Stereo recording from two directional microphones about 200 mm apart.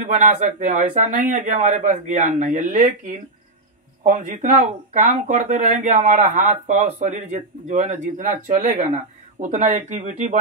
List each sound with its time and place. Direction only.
0.0 s speech: 35° right (ahead or behind)